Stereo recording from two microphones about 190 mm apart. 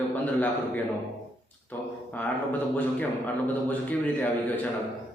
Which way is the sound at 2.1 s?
10° left (ahead or behind).